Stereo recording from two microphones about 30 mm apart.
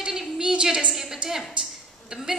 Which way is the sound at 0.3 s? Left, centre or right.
Right.